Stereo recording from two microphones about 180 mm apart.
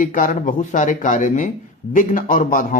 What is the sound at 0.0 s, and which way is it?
Speech, 50° left (ahead or behind).